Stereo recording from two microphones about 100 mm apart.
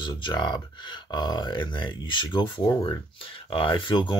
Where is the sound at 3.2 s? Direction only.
60° left (ahead or behind).